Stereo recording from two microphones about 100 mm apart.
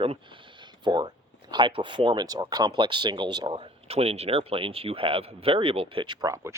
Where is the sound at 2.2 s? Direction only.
40° right (ahead or behind).